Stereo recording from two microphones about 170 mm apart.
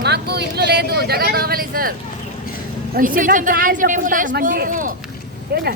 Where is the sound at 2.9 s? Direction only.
55° right (ahead or behind).